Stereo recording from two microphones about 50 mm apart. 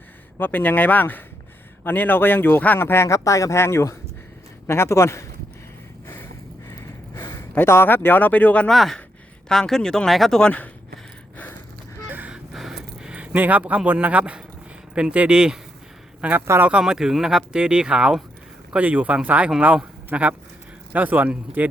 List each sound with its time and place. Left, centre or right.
0.3 s speech: left
2.7 s a man's voice: left
7.1 s a sound: left
7.6 s speech: left
8.7 s speech: centre
12.0 s a sound: right
12.5 s a sound: centre
13.1 s speech: right
16.8 s speech: centre
18.8 s speech: right